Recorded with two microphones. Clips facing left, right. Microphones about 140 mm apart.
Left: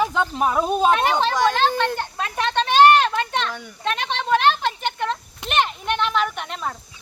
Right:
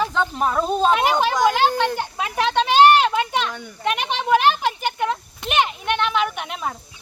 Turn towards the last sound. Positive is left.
turn(degrees=-5)  # may be behind; listen again after turning